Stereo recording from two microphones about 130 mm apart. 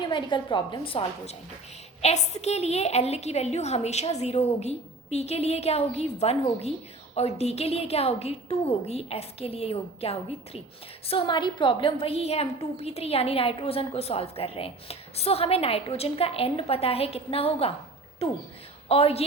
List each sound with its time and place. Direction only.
0.0 s a woman's voice: 35° left (ahead or behind)
2.0 s a woman's voice: 55° left (ahead or behind)